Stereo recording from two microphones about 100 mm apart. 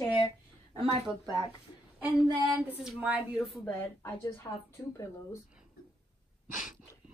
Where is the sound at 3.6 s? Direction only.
20° left (ahead or behind).